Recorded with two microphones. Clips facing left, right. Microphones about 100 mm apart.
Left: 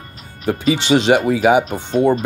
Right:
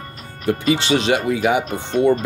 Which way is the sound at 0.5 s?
25° left (ahead or behind).